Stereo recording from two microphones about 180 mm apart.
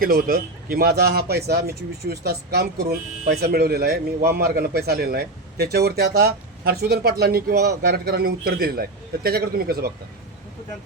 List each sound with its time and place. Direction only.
0.0 s a man's voice: 55° right (ahead or behind)